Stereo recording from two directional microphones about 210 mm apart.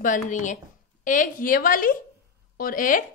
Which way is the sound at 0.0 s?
35° left (ahead or behind).